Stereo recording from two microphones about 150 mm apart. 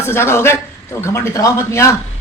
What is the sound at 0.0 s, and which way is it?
A man's voice, 15° left (ahead or behind).